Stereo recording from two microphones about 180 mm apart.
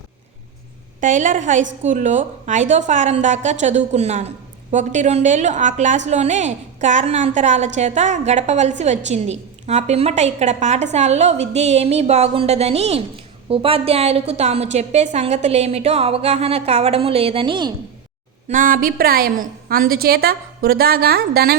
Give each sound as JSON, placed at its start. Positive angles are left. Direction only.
{"t": 1.0, "sound": "a woman's voice", "side_deg": -45}
{"t": 18.4, "sound": "a woman's voice", "side_deg": -50}